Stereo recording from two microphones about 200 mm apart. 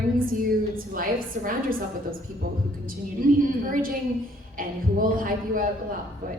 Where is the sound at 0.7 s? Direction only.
45° right (ahead or behind).